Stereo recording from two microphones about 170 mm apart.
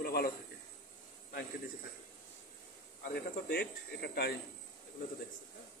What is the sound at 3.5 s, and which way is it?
Speech, 70° left (ahead or behind).